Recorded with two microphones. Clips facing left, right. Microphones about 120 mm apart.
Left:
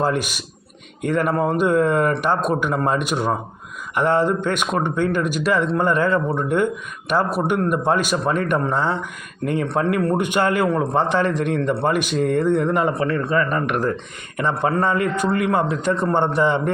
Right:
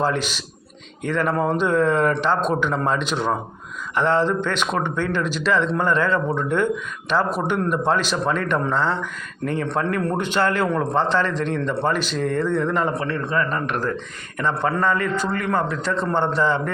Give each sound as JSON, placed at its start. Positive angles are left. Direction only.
{"t": 0.0, "sound": "speech", "side_deg": 10}